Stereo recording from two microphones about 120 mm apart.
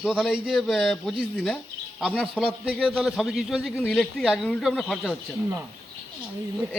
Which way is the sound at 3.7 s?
20° left (ahead or behind).